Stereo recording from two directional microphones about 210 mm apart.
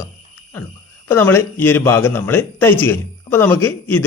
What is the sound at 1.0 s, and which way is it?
Speech, 10° left (ahead or behind).